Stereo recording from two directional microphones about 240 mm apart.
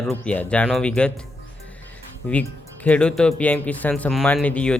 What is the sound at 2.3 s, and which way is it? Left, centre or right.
Speech, centre.